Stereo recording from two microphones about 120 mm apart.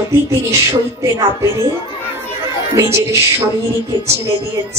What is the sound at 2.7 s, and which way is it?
Speech, 25° right (ahead or behind).